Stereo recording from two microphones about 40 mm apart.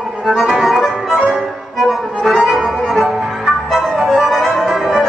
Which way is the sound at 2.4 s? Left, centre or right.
Centre.